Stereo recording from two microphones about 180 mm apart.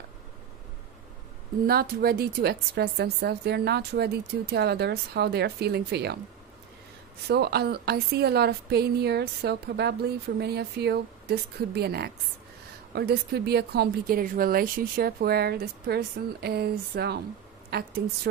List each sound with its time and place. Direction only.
1.7 s a woman's voice: 55° right (ahead or behind)
7.2 s a woman's voice: 65° right (ahead or behind)